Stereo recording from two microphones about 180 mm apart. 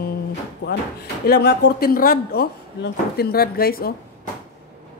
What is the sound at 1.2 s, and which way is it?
Speech, 65° left (ahead or behind).